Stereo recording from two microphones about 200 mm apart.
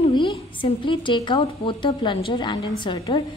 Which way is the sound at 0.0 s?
30° left (ahead or behind).